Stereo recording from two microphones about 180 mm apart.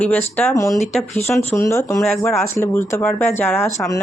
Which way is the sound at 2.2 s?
15° left (ahead or behind).